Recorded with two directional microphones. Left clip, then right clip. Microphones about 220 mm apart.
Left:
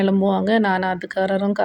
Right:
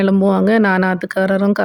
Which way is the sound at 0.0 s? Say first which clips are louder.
Right 4 dB; 25° right (ahead or behind).